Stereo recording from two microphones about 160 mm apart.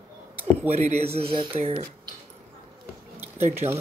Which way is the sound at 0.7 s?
45° right (ahead or behind).